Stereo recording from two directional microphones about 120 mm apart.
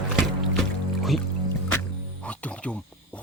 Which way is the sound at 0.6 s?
Centre (ahead or behind).